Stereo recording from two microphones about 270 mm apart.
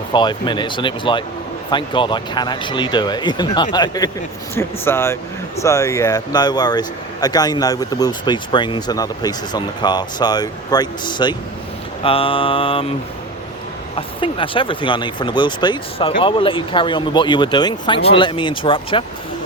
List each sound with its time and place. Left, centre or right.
0.1 s speech: centre
12.0 s mantra: centre
13.9 s speech: centre